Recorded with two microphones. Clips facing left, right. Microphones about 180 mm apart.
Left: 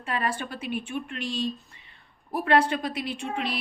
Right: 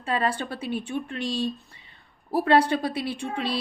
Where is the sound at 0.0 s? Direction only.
25° right (ahead or behind).